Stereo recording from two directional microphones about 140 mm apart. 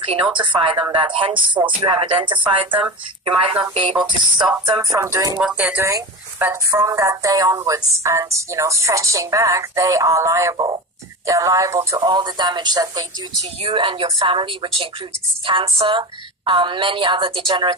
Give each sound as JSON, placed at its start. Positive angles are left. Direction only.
{"t": 0.3, "sound": "a woman's voice", "side_deg": -35}
{"t": 4.9, "sound": "a woman's voice", "side_deg": -20}
{"t": 5.4, "sound": "a woman's voice", "side_deg": -5}
{"t": 13.6, "sound": "a woman's voice", "side_deg": -40}